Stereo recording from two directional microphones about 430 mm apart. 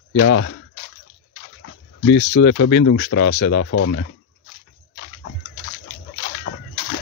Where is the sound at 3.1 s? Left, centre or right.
Left.